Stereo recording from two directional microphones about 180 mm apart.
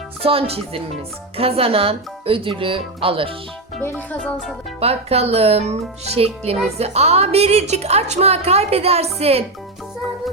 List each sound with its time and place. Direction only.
0.2 s a woman's voice: 30° right (ahead or behind)
3.8 s music: 10° left (ahead or behind)
4.8 s a woman's voice: 35° right (ahead or behind)